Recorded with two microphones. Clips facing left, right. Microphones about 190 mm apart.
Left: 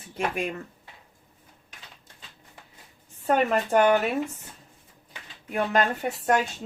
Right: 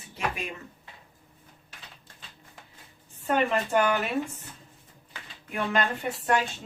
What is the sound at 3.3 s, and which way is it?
Speech, 40° left (ahead or behind).